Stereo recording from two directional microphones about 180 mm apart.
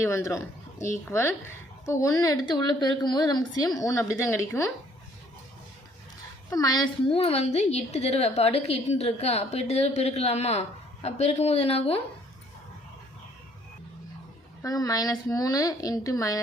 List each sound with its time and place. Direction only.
0.0 s a woman's voice: 15° left (ahead or behind)
6.5 s a woman's voice: 20° left (ahead or behind)
14.6 s a woman's voice: 20° left (ahead or behind)